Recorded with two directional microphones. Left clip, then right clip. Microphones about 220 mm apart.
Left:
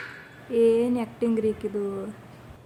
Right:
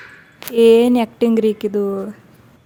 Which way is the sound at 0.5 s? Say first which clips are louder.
Right 10 dB; 40° right (ahead or behind).